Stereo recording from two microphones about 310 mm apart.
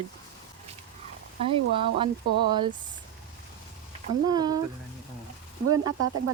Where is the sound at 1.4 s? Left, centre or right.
Centre.